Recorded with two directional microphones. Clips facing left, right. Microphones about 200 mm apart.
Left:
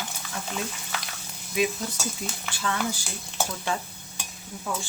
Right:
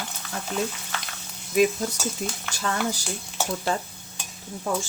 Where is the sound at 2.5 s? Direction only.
40° right (ahead or behind).